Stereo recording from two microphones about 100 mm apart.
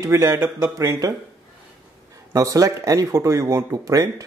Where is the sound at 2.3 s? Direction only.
35° right (ahead or behind).